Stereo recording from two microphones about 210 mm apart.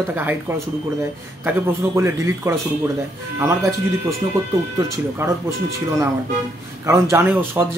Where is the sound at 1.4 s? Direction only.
10° right (ahead or behind).